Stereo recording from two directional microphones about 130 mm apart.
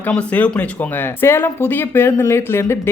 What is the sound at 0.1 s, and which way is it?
A woman's voice, 10° left (ahead or behind).